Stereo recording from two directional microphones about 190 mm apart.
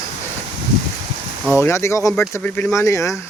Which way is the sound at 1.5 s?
15° left (ahead or behind).